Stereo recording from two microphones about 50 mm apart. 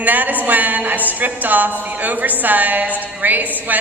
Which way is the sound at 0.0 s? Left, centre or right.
Right.